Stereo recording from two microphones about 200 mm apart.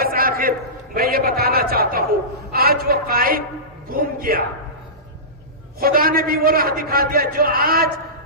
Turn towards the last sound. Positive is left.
turn(degrees=-50)  # may be behind; listen again after turning